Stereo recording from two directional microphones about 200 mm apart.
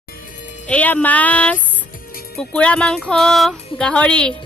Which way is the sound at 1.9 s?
45° left (ahead or behind).